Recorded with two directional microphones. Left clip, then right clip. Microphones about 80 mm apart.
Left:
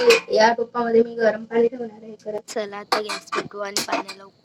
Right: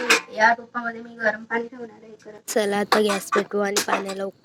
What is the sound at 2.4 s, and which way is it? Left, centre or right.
Speech, right.